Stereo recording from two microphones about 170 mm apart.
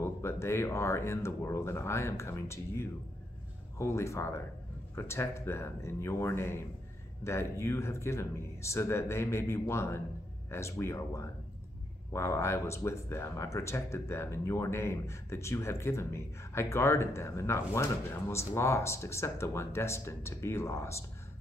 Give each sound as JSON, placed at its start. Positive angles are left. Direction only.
{"t": 0.0, "sound": "speech", "side_deg": 15}